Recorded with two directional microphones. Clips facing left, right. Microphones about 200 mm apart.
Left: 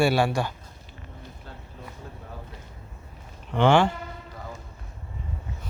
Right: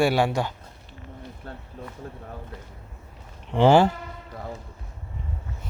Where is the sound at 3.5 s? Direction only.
35° right (ahead or behind).